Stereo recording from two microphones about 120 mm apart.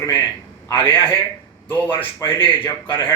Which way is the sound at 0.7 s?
20° left (ahead or behind).